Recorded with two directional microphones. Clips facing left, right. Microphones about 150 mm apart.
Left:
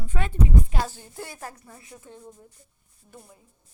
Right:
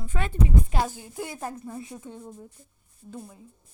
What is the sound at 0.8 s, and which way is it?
A woman's voice, 15° right (ahead or behind).